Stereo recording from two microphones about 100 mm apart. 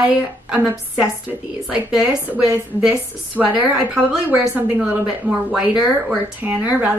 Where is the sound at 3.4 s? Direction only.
10° right (ahead or behind).